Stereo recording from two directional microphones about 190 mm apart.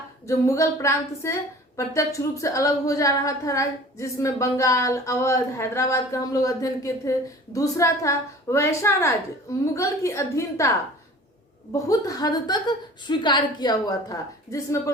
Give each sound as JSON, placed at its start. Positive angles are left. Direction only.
{"t": 0.3, "sound": "a woman's voice", "side_deg": 15}